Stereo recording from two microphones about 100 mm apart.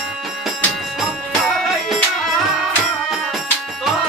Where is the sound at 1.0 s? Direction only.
Centre (ahead or behind).